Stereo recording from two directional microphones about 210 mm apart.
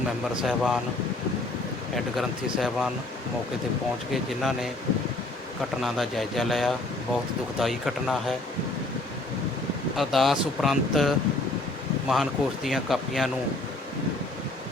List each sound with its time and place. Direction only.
0.4 s speech: centre (ahead or behind)
2.0 s speech: centre (ahead or behind)
4.1 s speech: centre (ahead or behind)
5.8 s speech: centre (ahead or behind)
10.0 s speech: centre (ahead or behind)